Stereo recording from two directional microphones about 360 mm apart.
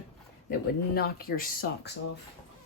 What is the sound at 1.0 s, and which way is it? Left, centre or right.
Speech, left.